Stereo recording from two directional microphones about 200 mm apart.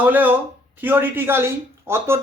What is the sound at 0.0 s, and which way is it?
Speech, 10° right (ahead or behind).